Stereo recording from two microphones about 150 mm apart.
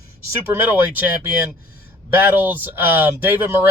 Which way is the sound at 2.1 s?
15° right (ahead or behind).